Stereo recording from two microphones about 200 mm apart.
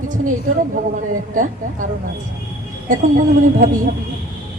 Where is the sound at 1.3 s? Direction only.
40° right (ahead or behind).